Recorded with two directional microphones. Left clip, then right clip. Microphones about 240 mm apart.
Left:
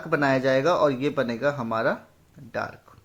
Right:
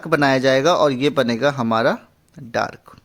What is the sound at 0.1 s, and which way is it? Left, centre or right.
A man's voice, right.